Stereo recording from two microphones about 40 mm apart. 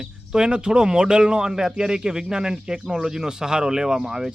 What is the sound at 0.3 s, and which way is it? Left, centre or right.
Speech, centre.